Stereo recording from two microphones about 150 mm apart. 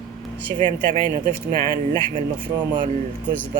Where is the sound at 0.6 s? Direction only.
65° right (ahead or behind).